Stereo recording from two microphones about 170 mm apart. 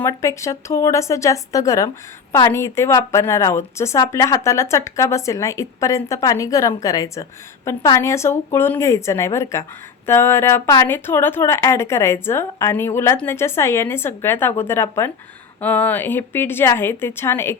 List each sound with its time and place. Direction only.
0.0 s speech: 20° left (ahead or behind)